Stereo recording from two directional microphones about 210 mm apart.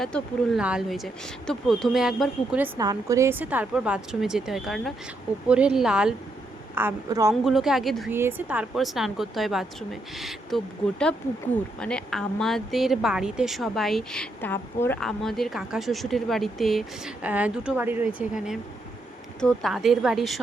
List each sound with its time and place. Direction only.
0.0 s a woman's voice: centre (ahead or behind)
2.7 s a woman's voice: 15° right (ahead or behind)
7.4 s a woman's voice: centre (ahead or behind)
11.8 s a woman's voice: 5° left (ahead or behind)